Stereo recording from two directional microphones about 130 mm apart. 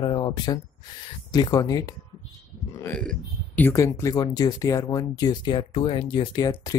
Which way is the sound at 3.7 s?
25° left (ahead or behind).